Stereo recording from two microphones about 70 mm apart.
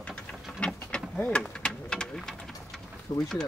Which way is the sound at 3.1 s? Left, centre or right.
Left.